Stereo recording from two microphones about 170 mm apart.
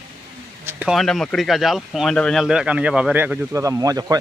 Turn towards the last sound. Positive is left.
turn(degrees=-20)  # may be behind; listen again after turning